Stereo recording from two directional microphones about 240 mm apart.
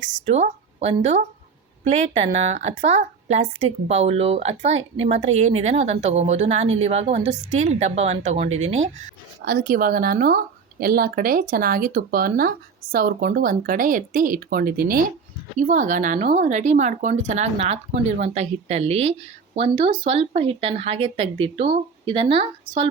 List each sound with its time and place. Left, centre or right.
0.3 s a woman's voice: right
9.4 s a woman's voice: right